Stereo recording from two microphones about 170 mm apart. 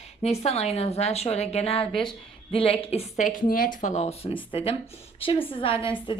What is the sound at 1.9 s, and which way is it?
Speech, 5° left (ahead or behind).